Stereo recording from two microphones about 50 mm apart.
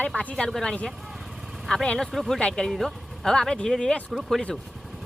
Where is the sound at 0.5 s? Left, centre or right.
Centre.